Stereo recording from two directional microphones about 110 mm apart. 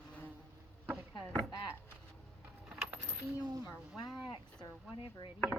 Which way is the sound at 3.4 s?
35° right (ahead or behind).